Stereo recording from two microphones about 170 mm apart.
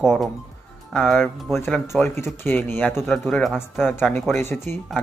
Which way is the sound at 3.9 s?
15° left (ahead or behind).